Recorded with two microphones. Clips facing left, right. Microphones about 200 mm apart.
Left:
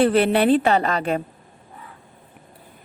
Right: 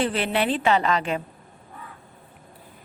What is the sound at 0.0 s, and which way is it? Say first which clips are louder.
A woman's voice: left 7 dB; 55° left (ahead or behind).